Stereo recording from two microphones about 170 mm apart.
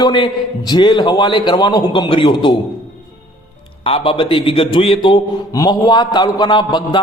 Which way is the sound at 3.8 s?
35° left (ahead or behind).